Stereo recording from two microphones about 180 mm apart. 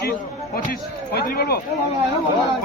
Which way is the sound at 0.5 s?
55° left (ahead or behind).